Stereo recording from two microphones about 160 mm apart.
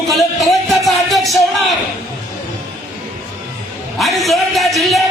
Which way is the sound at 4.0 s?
Centre (ahead or behind).